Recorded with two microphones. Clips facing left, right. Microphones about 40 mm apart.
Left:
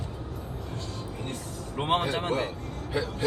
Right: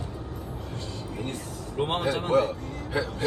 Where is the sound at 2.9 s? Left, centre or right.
Right.